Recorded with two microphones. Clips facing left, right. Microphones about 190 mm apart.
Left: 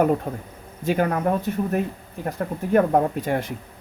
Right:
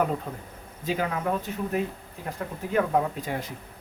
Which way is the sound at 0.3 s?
55° left (ahead or behind).